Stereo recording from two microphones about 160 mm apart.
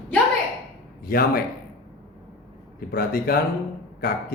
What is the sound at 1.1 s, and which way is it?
Speech, 65° left (ahead or behind).